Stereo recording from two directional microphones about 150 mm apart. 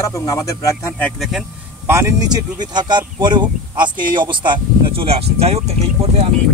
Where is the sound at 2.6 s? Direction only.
30° right (ahead or behind).